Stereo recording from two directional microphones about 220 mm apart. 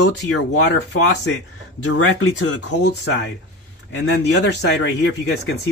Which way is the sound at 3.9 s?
55° left (ahead or behind).